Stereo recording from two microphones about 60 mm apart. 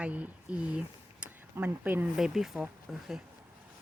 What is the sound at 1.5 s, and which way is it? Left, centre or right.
Speech, right.